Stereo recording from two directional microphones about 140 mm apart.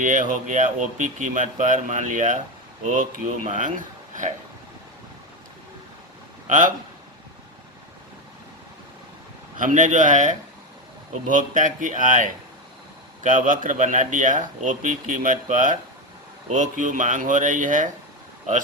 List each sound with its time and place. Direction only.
0.0 s speech: 70° right (ahead or behind)
6.5 s speech: 70° right (ahead or behind)
9.6 s speech: 65° right (ahead or behind)